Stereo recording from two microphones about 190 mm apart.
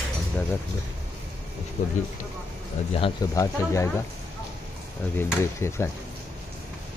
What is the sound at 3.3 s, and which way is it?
Speech, 15° left (ahead or behind).